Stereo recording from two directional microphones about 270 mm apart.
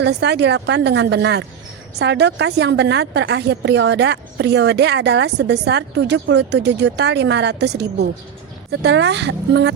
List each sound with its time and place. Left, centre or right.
0.0 s a woman's voice: right